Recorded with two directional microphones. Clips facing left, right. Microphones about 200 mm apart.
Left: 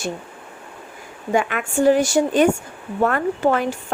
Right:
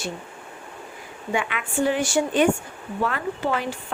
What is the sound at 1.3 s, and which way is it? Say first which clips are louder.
Speech: left 6 dB; 45° left (ahead or behind).